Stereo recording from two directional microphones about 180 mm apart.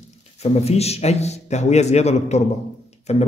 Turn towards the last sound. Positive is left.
turn(degrees=40)  # may be behind; listen again after turning